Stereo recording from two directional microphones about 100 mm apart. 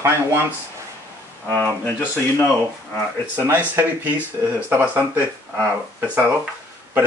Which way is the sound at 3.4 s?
20° right (ahead or behind).